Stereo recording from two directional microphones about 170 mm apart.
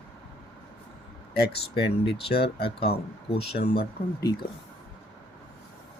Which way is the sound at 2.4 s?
35° left (ahead or behind).